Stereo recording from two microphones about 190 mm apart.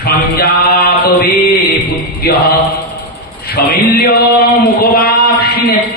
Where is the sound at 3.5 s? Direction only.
55° left (ahead or behind).